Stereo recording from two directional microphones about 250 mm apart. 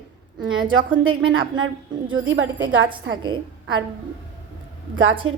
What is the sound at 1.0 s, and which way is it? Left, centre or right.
A woman's voice, right.